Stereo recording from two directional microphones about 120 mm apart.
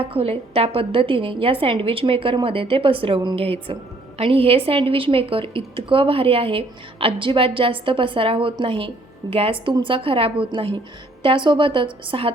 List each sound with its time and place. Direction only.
0.0 s a woman's voice: 50° right (ahead or behind)